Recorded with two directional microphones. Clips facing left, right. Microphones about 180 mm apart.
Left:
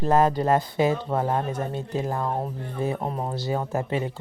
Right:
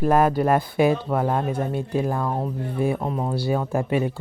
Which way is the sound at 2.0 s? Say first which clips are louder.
Right 3 dB; 20° left (ahead or behind).